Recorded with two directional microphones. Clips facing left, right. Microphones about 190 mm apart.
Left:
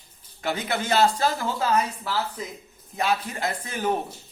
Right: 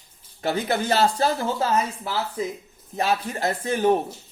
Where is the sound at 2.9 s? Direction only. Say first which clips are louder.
Right 2 dB; 35° right (ahead or behind).